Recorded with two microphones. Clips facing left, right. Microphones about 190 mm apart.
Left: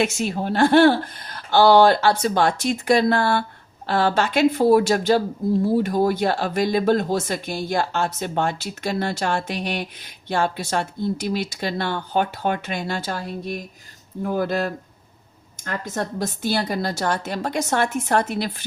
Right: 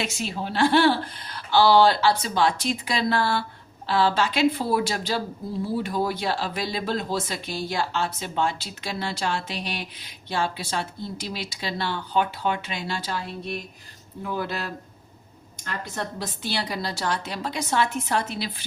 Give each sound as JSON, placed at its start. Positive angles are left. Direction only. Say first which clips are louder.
{"t": 0.0, "sound": "speech", "louder": "left 7 dB", "side_deg": 50}